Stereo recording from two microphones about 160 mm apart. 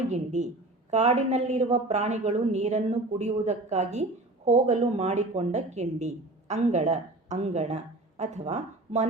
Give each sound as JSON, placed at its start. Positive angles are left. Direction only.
{"t": 0.1, "sound": "a woman's voice", "side_deg": -45}